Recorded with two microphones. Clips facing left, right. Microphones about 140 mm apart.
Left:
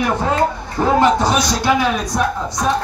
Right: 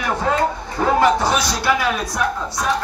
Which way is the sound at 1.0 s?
20° left (ahead or behind).